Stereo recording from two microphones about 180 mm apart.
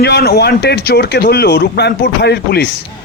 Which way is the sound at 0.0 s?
60° left (ahead or behind).